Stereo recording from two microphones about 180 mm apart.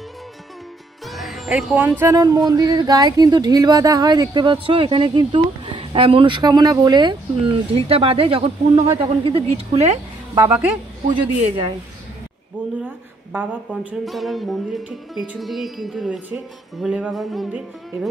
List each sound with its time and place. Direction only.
1.0 s music: centre (ahead or behind)
2.1 s speech: 20° right (ahead or behind)
10.3 s speech: 15° right (ahead or behind)
11.1 s speech: 30° right (ahead or behind)
12.8 s a woman's voice: 10° right (ahead or behind)